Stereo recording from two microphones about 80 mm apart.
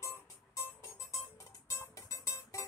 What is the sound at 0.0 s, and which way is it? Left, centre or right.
Music, left.